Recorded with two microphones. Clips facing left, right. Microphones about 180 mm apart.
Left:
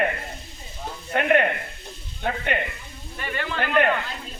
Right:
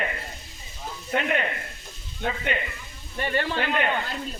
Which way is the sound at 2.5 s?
55° left (ahead or behind).